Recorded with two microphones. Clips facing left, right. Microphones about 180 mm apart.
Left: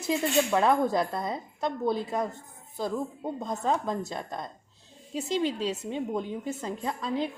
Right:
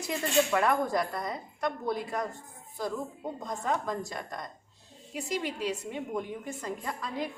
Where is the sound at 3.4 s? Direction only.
25° left (ahead or behind).